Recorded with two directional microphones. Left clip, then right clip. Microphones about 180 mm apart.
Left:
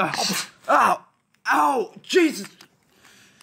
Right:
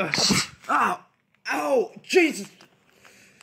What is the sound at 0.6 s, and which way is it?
Groan, 55° left (ahead or behind).